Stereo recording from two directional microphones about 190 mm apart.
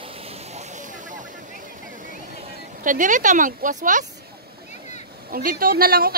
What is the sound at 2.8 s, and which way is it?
Speech, 45° right (ahead or behind).